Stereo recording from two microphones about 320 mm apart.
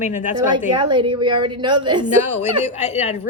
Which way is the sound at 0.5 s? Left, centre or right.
Centre.